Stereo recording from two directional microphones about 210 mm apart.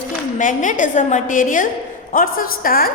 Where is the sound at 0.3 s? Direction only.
40° left (ahead or behind).